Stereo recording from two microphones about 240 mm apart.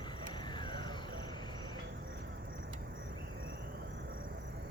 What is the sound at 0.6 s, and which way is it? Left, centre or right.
Music, centre.